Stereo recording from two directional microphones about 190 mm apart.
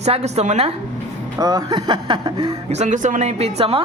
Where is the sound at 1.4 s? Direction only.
20° right (ahead or behind).